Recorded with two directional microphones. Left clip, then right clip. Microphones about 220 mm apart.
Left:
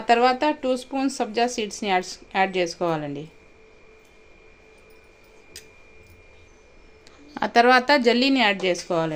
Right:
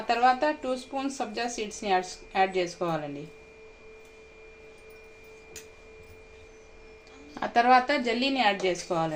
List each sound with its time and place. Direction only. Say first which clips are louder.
0.1 s speech: left 5 dB; 55° left (ahead or behind)
7.3 s speech: left 4 dB; 45° left (ahead or behind)